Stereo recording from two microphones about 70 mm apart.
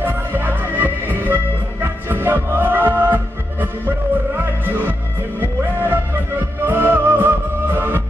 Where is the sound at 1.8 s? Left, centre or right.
Right.